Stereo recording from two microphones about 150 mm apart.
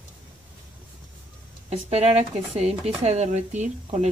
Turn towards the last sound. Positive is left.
turn(degrees=-50)  # may be behind; listen again after turning